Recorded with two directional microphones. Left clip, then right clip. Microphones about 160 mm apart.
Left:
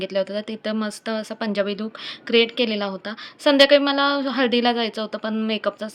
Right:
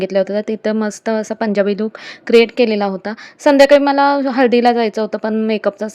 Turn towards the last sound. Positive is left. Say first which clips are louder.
# right 7 dB
turn(degrees=-50)  # may be behind; listen again after turning